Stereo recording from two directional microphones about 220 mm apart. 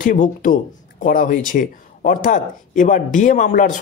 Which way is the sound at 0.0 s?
35° left (ahead or behind).